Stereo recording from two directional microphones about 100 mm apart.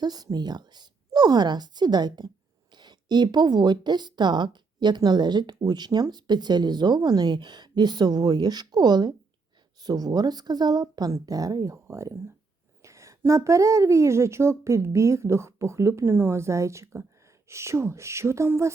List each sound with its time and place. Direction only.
0.0 s a woman's voice: 40° right (ahead or behind)